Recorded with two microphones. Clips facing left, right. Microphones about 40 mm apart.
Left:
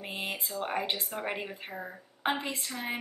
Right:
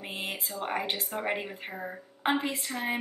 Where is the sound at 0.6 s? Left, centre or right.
Centre.